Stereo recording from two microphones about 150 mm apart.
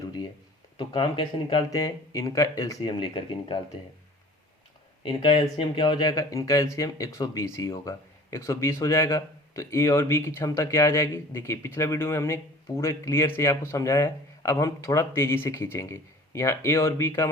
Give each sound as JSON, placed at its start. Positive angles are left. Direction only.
{"t": 0.8, "sound": "speech", "side_deg": 30}
{"t": 5.0, "sound": "speech", "side_deg": 35}